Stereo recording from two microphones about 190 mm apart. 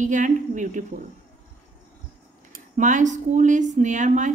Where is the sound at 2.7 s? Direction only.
40° right (ahead or behind).